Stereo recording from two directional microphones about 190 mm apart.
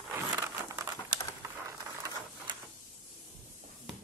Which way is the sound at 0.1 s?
15° right (ahead or behind).